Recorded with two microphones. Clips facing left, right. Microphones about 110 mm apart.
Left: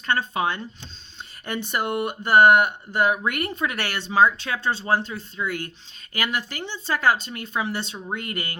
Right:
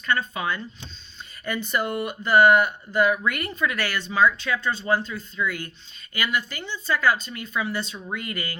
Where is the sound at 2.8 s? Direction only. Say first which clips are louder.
Right 1 dB; 15° left (ahead or behind).